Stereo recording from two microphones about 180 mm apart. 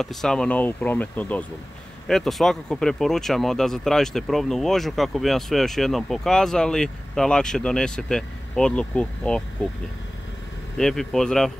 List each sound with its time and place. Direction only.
0.0 s speech: centre (ahead or behind)
10.8 s speech: 5° left (ahead or behind)